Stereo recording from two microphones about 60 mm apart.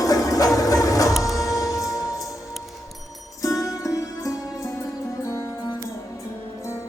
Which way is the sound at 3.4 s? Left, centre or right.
Left.